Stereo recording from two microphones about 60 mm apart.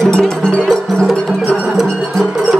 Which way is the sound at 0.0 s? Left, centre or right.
Centre.